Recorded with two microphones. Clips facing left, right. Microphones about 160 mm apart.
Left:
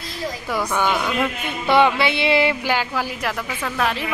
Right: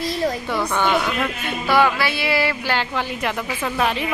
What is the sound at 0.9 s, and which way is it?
Speech, 5° left (ahead or behind).